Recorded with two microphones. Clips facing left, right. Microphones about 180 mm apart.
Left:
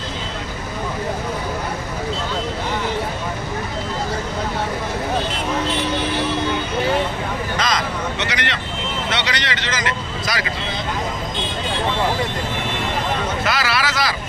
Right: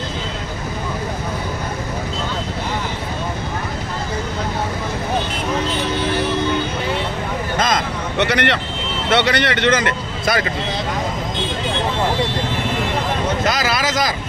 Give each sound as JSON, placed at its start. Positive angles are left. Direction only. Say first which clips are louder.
{"t": 7.5, "sound": "vehicle", "louder": "right 3 dB", "side_deg": -50}
{"t": 9.1, "sound": "speech", "louder": "right 12 dB", "side_deg": -55}
{"t": 13.5, "sound": "a sound", "louder": "right 2 dB", "side_deg": -40}